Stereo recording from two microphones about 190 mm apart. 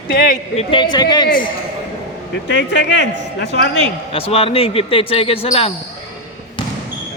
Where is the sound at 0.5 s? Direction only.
25° left (ahead or behind).